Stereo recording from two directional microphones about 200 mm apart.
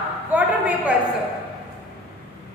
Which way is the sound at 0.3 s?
10° right (ahead or behind).